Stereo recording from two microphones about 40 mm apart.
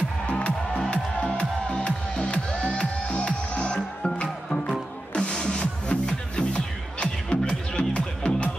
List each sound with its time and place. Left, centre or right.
1.3 s music: left